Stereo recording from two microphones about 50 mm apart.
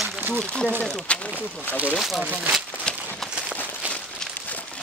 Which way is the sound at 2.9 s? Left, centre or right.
Centre.